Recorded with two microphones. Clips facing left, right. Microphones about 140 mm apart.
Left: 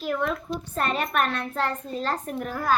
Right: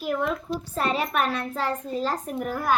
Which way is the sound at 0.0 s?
10° right (ahead or behind).